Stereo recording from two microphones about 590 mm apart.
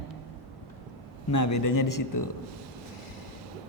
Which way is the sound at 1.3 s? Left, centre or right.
Left.